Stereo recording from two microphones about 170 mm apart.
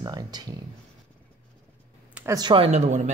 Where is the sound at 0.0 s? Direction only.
25° right (ahead or behind).